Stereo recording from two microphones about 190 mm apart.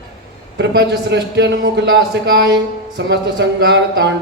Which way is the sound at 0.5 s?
65° right (ahead or behind).